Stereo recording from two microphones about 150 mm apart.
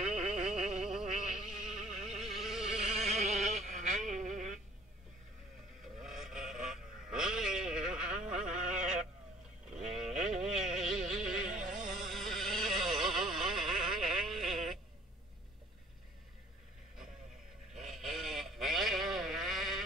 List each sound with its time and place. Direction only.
0.2 s mosquito: 5° right (ahead or behind)
3.0 s a sound: 45° right (ahead or behind)
5.9 s a sound: centre (ahead or behind)
8.3 s music: 5° right (ahead or behind)
11.4 s music: 65° right (ahead or behind)
11.8 s vehicle: centre (ahead or behind)
17.7 s vehicle: centre (ahead or behind)